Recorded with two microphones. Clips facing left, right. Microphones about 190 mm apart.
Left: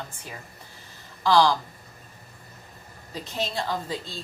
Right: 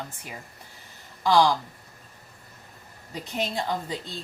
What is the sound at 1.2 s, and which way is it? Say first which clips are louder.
Speech: even; 15° right (ahead or behind).